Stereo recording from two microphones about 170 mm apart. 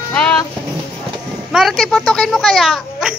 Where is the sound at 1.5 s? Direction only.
Centre (ahead or behind).